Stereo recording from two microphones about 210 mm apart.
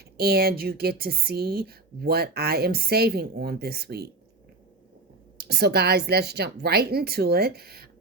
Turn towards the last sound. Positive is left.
turn(degrees=-45)  # may be behind; listen again after turning